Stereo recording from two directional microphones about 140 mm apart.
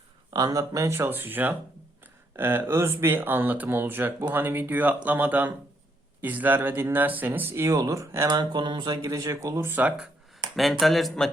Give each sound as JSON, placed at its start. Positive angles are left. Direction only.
{"t": 0.3, "sound": "speech", "side_deg": -25}
{"t": 10.6, "sound": "speech", "side_deg": 0}